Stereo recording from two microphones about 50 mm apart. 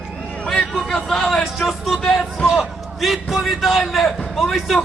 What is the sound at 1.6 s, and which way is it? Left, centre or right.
Music, centre.